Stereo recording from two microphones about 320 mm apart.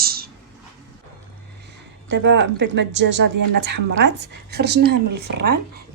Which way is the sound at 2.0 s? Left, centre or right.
Right.